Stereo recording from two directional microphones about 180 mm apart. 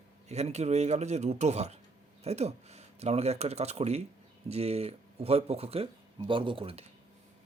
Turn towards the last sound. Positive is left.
turn(degrees=-30)  # may be behind; listen again after turning